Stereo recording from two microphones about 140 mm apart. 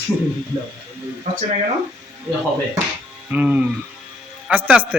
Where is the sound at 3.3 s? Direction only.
10° right (ahead or behind).